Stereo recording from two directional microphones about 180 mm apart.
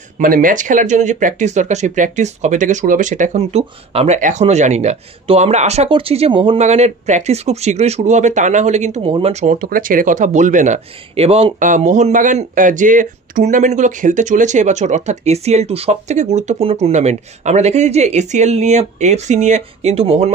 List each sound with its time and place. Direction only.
0.2 s speech: 50° right (ahead or behind)